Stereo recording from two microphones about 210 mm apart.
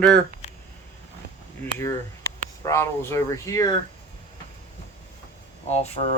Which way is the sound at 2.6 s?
10° left (ahead or behind).